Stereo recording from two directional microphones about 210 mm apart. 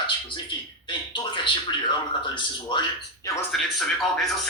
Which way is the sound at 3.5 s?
Centre (ahead or behind).